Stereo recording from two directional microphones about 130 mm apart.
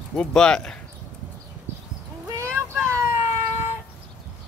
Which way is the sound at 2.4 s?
20° right (ahead or behind).